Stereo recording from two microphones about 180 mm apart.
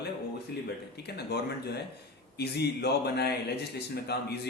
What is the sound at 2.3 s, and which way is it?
A man's voice, 65° left (ahead or behind).